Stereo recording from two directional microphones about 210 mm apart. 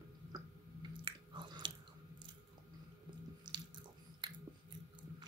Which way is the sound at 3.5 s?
20° right (ahead or behind).